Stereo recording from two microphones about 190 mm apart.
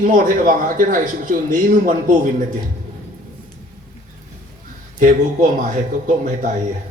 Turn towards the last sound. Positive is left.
turn(degrees=-40)  # may be behind; listen again after turning